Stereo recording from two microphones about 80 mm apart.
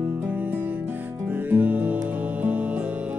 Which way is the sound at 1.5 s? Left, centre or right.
Right.